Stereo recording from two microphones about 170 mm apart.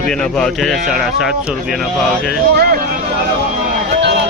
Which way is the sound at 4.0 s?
80° right.